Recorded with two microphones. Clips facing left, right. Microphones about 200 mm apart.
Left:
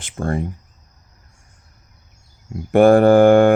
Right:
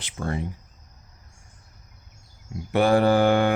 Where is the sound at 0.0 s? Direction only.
50° left (ahead or behind).